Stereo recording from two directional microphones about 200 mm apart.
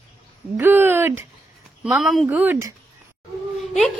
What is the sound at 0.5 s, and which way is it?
A woman's voice, 10° right (ahead or behind).